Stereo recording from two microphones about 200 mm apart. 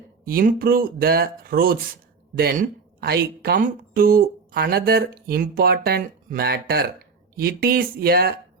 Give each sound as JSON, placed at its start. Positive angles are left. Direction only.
{"t": 0.3, "sound": "speech", "side_deg": -50}